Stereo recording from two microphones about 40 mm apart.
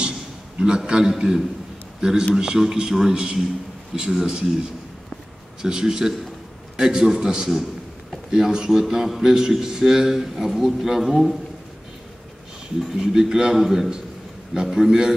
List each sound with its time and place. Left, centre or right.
0.6 s a man's voice: right
5.6 s a man's voice: centre
13.0 s a man's voice: centre